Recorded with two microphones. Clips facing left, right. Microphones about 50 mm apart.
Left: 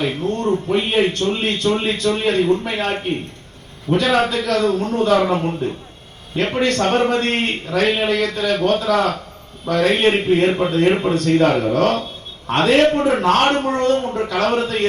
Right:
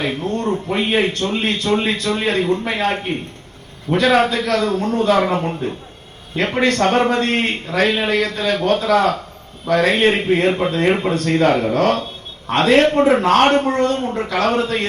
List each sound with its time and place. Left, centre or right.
0.0 s a man's voice: right